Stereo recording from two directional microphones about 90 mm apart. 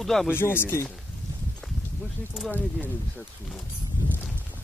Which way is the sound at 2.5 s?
20° left (ahead or behind).